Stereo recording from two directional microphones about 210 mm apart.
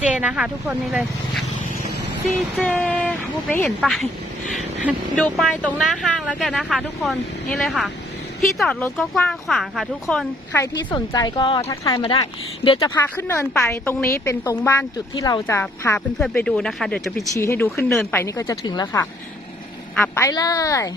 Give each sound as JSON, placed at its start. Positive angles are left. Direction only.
{"t": 0.0, "sound": "speech", "side_deg": -5}
{"t": 2.6, "sound": "a woman's voice", "side_deg": 5}
{"t": 10.9, "sound": "speech", "side_deg": 20}
{"t": 13.0, "sound": "a woman's voice", "side_deg": 10}
{"t": 17.3, "sound": "a woman's voice", "side_deg": 15}